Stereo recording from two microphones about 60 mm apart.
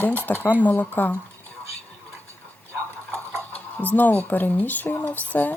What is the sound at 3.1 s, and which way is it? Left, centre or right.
Speech, left.